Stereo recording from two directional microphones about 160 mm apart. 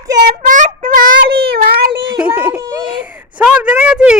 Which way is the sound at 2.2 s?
10° right (ahead or behind).